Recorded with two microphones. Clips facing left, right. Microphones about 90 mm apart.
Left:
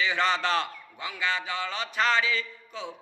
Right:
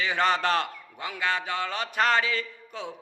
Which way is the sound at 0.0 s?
50° right (ahead or behind).